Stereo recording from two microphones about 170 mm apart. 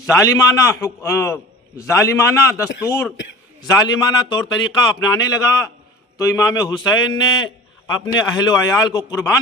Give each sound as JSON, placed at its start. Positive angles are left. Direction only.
{"t": 0.0, "sound": "a man's voice", "side_deg": 20}